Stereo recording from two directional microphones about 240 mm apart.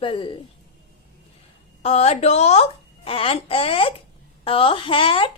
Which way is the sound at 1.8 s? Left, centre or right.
Left.